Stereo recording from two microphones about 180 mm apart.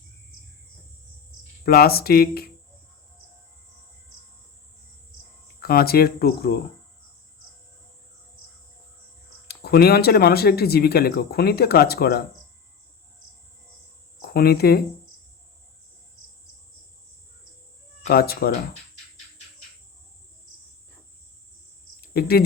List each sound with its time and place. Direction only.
1.6 s speech: 60° left (ahead or behind)
5.5 s speech: 60° left (ahead or behind)
9.5 s speech: 60° left (ahead or behind)
14.2 s speech: 60° left (ahead or behind)
18.1 s speech: 55° left (ahead or behind)
22.0 s cricket: 60° left (ahead or behind)